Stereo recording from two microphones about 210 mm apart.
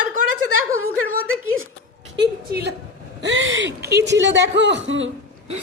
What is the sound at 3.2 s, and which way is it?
Speech, 65° right (ahead or behind).